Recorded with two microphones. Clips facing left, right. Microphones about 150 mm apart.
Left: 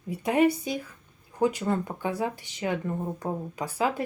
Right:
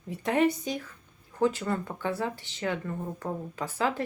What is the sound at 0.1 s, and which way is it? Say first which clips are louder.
Speech: left 2 dB; 10° left (ahead or behind).